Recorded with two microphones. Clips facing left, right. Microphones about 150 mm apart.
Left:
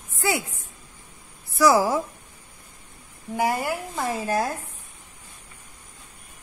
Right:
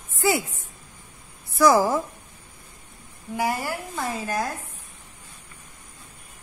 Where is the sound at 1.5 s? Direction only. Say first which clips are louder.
Right 1 dB; 5° left (ahead or behind).